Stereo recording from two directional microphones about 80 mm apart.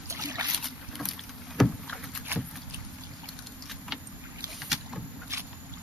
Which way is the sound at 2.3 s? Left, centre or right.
Right.